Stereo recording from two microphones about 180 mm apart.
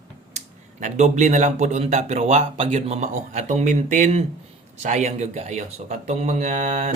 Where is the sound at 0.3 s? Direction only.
40° right (ahead or behind).